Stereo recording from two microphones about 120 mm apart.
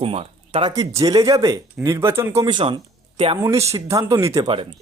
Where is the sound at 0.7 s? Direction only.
30° right (ahead or behind).